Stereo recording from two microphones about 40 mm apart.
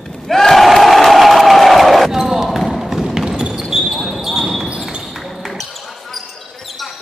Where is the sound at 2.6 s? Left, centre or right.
Centre.